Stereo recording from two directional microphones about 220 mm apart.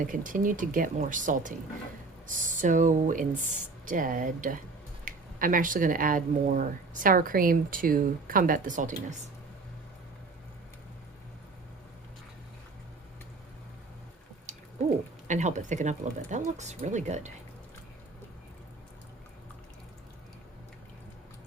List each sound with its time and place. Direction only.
0.1 s speech: 35° right (ahead or behind)
15.3 s speech: 35° right (ahead or behind)